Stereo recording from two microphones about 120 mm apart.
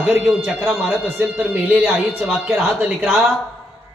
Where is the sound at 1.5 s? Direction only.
15° right (ahead or behind).